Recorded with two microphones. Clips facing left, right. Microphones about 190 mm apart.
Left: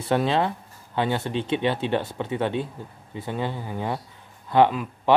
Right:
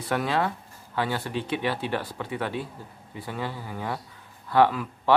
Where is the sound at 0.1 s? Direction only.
25° left (ahead or behind).